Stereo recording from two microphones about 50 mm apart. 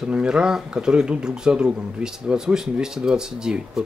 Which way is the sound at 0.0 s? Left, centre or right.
Centre.